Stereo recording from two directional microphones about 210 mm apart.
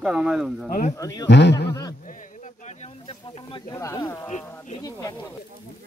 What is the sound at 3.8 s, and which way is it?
Speech, 15° left (ahead or behind).